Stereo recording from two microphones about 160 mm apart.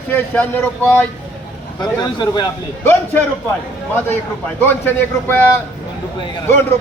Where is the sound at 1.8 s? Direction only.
25° left (ahead or behind).